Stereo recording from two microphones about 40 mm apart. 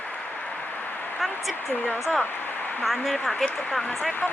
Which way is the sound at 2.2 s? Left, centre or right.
Left.